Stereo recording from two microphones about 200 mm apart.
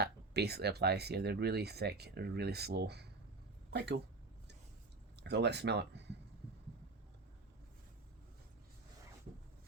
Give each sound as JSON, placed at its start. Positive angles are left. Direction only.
{"t": 0.0, "sound": "speech", "side_deg": -55}
{"t": 5.2, "sound": "speech", "side_deg": -60}